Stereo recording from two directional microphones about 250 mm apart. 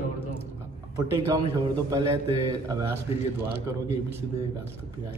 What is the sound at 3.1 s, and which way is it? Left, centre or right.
Speech, left.